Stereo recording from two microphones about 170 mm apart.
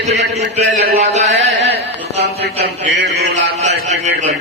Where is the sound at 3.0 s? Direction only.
90° right.